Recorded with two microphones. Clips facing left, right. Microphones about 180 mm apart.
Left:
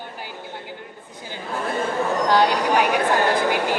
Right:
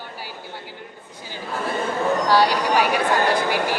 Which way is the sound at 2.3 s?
20° left (ahead or behind).